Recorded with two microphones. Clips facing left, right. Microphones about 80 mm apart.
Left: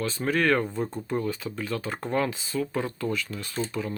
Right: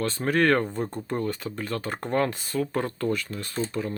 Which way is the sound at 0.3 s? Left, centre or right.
Right.